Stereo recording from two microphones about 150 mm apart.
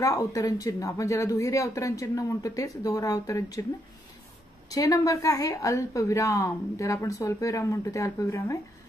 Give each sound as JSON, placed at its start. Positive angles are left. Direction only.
{"t": 0.0, "sound": "a woman's voice", "side_deg": 20}
{"t": 4.6, "sound": "a woman's voice", "side_deg": 25}